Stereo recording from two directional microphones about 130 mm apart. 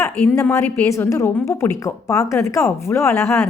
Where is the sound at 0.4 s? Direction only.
15° left (ahead or behind).